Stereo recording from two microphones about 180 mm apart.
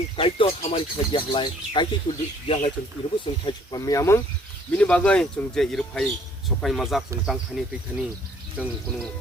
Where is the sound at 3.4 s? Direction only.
20° left (ahead or behind).